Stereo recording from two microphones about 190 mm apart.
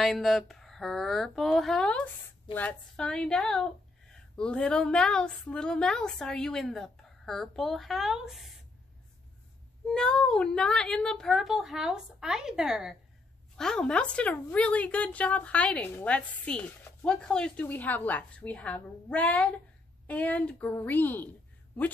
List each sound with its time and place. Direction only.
0.0 s a woman's voice: centre (ahead or behind)
9.8 s a woman's voice: 5° left (ahead or behind)